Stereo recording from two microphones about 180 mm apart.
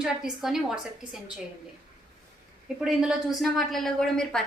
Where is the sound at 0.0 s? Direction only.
5° right (ahead or behind).